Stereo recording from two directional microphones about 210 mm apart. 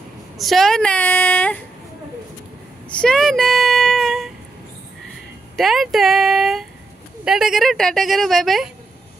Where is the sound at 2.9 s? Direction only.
5° left (ahead or behind).